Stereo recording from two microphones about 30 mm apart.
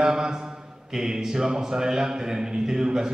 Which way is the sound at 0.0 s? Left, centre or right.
Centre.